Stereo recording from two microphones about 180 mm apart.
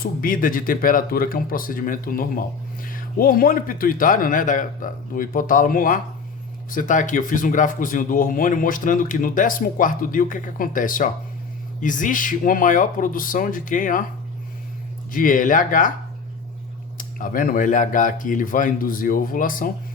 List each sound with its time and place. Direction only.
0.0 s speech: 50° left (ahead or behind)
15.1 s speech: 50° left (ahead or behind)
17.0 s speech: 50° left (ahead or behind)